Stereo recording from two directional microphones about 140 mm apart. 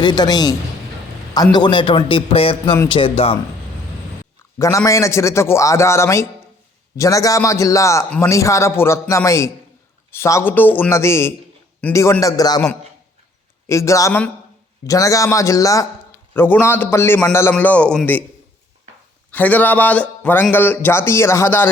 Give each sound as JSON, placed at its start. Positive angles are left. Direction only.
{"t": 0.0, "sound": "speech", "side_deg": 30}
{"t": 1.5, "sound": "a man's voice", "side_deg": 35}
{"t": 4.5, "sound": "a man's voice", "side_deg": 20}
{"t": 12.2, "sound": "speech", "side_deg": 25}
{"t": 13.7, "sound": "speech", "side_deg": 20}
{"t": 19.3, "sound": "speech", "side_deg": 10}